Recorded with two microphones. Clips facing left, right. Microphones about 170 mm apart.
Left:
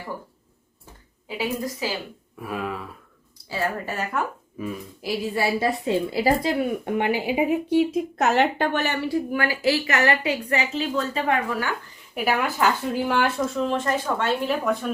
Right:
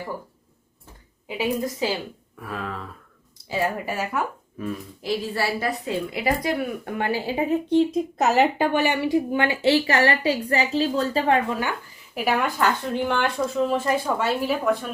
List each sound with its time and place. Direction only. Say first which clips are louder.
1.4 s a woman's voice: right 3 dB; 20° right (ahead or behind)
2.4 s speech: left 2 dB; 10° left (ahead or behind)
3.5 s a woman's voice: right 2 dB; 15° right (ahead or behind)
4.5 s speech: right 1 dB; 5° left (ahead or behind)
5.3 s a woman's voice: left 2 dB; 20° left (ahead or behind); by 11.7 s 20° right (ahead or behind)
12.1 s speech: even; centre (ahead or behind)